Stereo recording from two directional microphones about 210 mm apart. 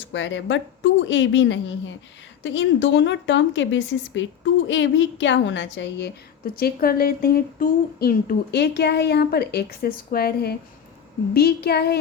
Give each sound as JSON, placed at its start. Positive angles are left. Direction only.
{"t": 0.1, "sound": "a woman's voice", "side_deg": 60}